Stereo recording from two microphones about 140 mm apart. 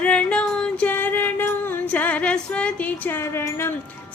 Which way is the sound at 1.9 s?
10° left (ahead or behind).